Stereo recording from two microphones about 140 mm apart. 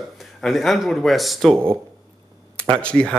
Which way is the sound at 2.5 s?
10° left (ahead or behind).